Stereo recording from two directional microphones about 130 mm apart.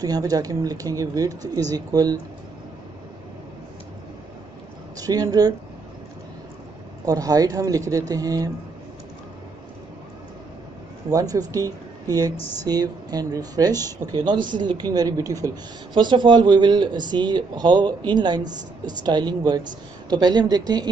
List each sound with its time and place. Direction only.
0.0 s speech: 30° right (ahead or behind)
4.9 s speech: 30° right (ahead or behind)
7.1 s speech: 30° right (ahead or behind)
11.1 s speech: 30° right (ahead or behind)